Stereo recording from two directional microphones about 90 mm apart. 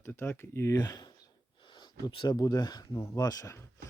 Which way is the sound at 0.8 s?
45° left (ahead or behind).